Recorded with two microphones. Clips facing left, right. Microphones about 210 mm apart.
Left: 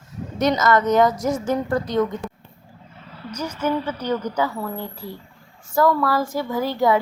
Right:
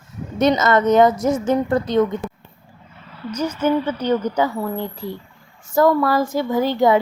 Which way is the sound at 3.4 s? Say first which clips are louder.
Right 5 dB; 25° right (ahead or behind).